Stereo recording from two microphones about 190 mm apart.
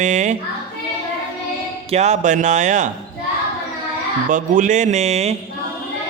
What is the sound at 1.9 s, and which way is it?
A man's voice, 35° right (ahead or behind).